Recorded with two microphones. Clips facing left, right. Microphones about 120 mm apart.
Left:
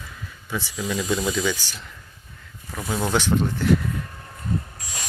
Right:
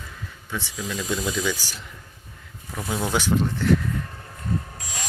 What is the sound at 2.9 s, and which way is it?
Speech, 5° right (ahead or behind).